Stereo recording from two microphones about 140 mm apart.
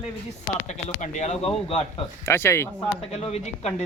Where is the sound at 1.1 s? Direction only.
55° left (ahead or behind).